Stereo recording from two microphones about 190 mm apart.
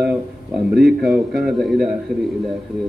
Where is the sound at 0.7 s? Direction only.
55° right (ahead or behind).